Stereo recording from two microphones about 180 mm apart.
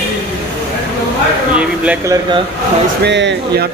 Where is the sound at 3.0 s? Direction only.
75° right (ahead or behind).